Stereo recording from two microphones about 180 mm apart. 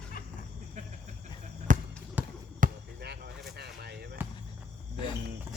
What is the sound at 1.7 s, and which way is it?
Basketball bounce, 45° right (ahead or behind).